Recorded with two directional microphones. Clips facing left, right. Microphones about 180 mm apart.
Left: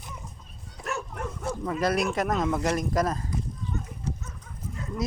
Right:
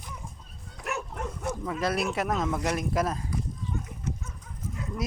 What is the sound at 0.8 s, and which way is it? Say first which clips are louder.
Bow-wow: left 1 dB; 15° right (ahead or behind).